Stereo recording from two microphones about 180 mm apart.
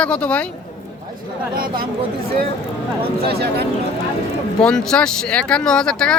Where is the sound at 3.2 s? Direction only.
65° right (ahead or behind).